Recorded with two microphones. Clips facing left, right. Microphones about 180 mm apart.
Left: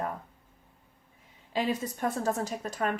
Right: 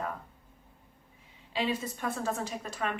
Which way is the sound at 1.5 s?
45° left (ahead or behind).